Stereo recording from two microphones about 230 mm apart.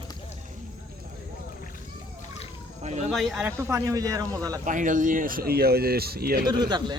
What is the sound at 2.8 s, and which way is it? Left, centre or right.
Speech, right.